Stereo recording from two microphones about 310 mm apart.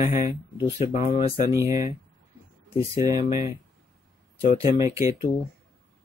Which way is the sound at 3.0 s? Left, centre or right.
Centre.